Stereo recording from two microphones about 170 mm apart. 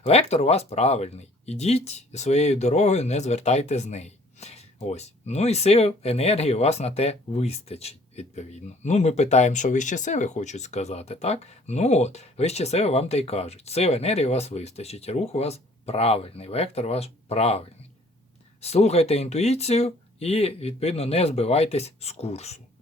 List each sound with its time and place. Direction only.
0.0 s speech: 35° left (ahead or behind)